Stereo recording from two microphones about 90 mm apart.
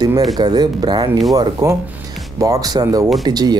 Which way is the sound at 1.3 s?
40° right (ahead or behind).